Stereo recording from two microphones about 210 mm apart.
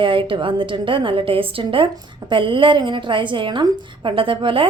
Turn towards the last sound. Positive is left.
turn(degrees=-25)  # may be behind; listen again after turning